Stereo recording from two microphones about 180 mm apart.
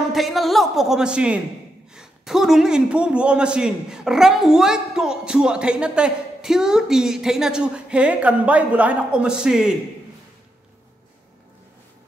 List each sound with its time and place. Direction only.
0.1 s a man's voice: centre (ahead or behind)